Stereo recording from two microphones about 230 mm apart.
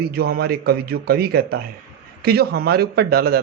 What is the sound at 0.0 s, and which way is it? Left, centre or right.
Speech, right.